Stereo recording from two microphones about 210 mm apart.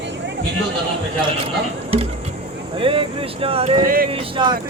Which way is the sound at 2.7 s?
25° right (ahead or behind).